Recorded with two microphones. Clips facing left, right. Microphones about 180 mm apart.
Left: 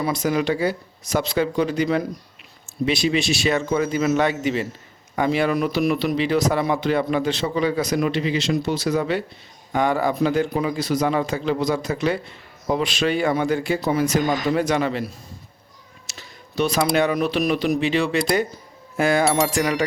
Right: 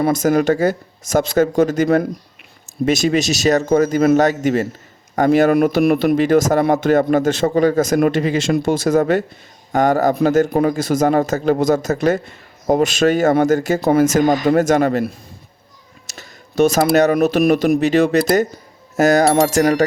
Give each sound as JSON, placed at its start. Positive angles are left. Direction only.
{"t": 0.0, "sound": "speech", "side_deg": -45}
{"t": 16.0, "sound": "a sound", "side_deg": -45}
{"t": 16.9, "sound": "speech", "side_deg": -45}